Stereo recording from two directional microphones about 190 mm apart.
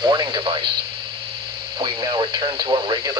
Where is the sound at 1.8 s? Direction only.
25° right (ahead or behind).